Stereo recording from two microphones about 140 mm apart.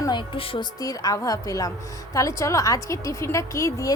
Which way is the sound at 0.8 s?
25° left (ahead or behind).